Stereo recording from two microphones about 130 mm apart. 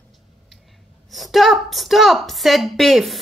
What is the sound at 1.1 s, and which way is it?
A woman's voice, centre (ahead or behind).